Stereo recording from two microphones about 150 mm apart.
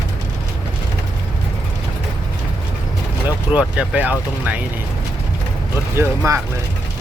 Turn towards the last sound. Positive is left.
turn(degrees=-20)  # may be behind; listen again after turning